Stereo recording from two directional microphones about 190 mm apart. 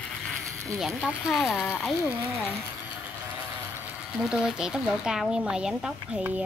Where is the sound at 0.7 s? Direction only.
Centre (ahead or behind).